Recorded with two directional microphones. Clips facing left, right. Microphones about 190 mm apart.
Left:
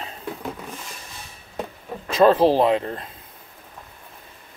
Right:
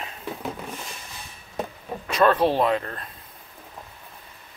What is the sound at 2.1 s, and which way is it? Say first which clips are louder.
Speech: left 4 dB; 25° left (ahead or behind).